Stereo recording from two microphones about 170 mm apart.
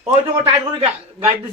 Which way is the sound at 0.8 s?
35° right (ahead or behind).